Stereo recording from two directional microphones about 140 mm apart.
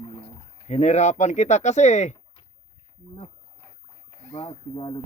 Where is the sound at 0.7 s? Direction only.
55° left (ahead or behind).